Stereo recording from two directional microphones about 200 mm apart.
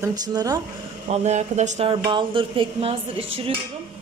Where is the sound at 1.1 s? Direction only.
35° right (ahead or behind).